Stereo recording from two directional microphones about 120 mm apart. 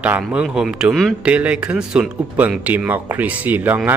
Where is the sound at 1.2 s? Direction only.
10° right (ahead or behind).